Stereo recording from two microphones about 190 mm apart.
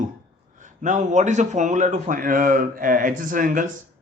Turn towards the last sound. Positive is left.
turn(degrees=-45)  # may be behind; listen again after turning